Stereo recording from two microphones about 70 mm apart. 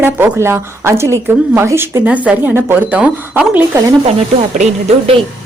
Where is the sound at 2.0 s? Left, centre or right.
Right.